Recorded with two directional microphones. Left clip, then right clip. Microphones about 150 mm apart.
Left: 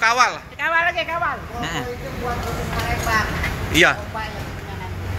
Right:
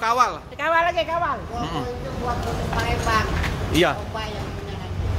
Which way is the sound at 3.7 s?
20° right (ahead or behind).